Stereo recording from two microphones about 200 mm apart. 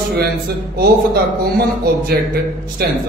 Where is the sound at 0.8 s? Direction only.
50° right (ahead or behind).